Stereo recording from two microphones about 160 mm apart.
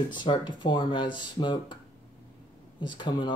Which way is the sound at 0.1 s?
30° left (ahead or behind).